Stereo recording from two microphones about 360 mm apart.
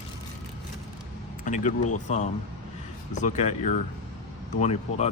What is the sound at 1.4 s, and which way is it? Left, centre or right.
Speech, left.